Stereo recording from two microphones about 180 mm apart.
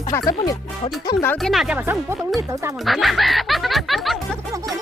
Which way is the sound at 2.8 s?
Centre (ahead or behind).